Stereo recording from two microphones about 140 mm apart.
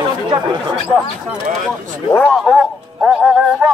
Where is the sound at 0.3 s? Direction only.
35° right (ahead or behind).